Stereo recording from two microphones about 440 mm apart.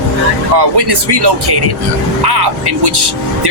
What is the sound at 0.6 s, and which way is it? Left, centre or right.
Speech, right.